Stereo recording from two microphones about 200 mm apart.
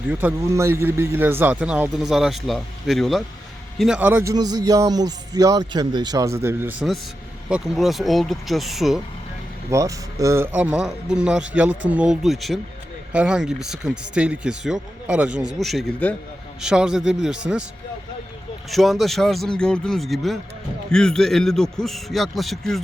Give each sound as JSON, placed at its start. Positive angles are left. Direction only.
{"t": 0.1, "sound": "a man's voice", "side_deg": -5}
{"t": 9.6, "sound": "a man's voice", "side_deg": -15}
{"t": 18.7, "sound": "speech", "side_deg": 0}